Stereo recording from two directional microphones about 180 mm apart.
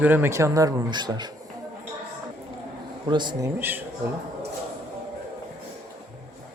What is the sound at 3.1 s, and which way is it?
Speech, 25° right (ahead or behind).